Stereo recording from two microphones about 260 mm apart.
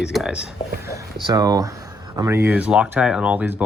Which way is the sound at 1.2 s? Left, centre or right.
Centre.